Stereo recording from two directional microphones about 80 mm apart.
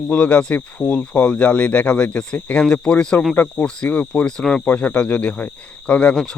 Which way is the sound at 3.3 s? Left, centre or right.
Left.